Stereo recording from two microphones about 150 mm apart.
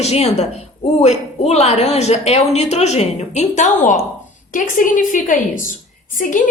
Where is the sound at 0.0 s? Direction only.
45° left (ahead or behind).